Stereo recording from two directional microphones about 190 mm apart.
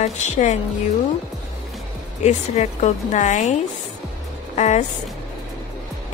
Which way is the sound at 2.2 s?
35° left (ahead or behind).